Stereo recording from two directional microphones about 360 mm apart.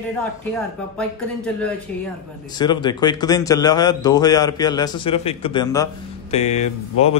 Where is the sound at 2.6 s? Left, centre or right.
Centre.